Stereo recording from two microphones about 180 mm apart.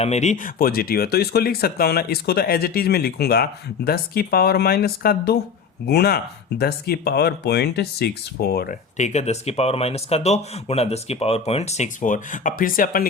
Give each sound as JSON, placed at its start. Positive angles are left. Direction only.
{"t": 0.0, "sound": "speech", "side_deg": 40}
{"t": 9.0, "sound": "speech", "side_deg": 40}